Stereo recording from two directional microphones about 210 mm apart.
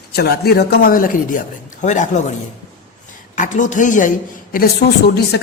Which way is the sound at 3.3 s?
35° left (ahead or behind).